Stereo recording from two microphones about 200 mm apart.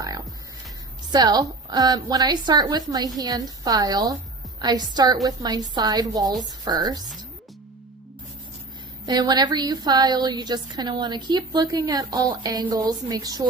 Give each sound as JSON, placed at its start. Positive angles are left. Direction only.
{"t": 1.1, "sound": "a woman's voice", "side_deg": -20}
{"t": 9.0, "sound": "a woman's voice", "side_deg": -20}